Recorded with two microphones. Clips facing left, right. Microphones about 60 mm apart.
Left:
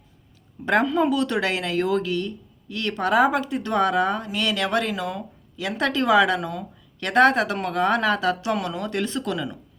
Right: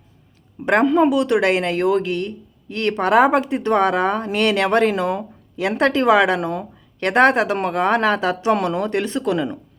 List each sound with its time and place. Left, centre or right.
0.6 s speech: right
1.1 s a woman's voice: centre
1.4 s speech: right
8.5 s speech: right